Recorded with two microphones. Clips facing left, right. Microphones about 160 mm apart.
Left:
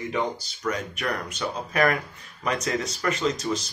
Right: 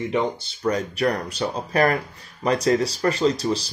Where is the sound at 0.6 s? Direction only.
35° right (ahead or behind).